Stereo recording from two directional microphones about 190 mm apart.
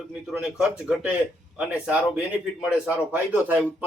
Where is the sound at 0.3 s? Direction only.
5° right (ahead or behind).